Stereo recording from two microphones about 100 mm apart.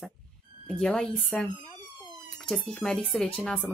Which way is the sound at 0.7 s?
5° left (ahead or behind).